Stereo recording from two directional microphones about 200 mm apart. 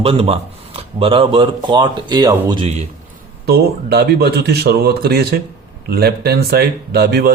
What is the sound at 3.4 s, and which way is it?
Speech, 50° right (ahead or behind).